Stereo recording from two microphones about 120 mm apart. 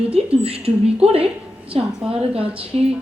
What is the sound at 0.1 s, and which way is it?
A woman's voice, 55° right (ahead or behind).